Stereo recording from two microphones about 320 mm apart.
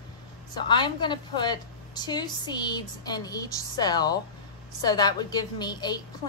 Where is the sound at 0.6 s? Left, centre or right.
Centre.